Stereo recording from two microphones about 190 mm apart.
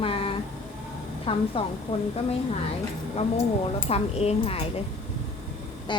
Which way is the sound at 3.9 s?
30° left (ahead or behind).